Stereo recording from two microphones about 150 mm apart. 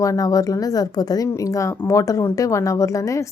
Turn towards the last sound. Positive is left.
turn(degrees=20)  # may be behind; listen again after turning